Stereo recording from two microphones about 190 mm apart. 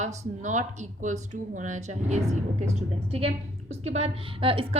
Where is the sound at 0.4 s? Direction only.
40° right (ahead or behind).